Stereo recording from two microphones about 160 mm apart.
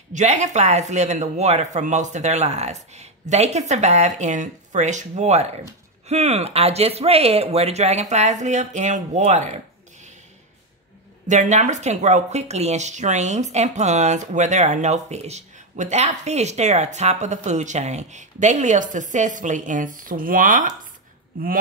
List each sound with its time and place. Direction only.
0.1 s speech: 45° right (ahead or behind)
11.2 s speech: 50° right (ahead or behind)